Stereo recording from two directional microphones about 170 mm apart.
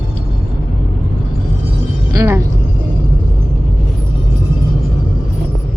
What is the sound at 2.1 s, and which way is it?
Vehicle, 15° right (ahead or behind).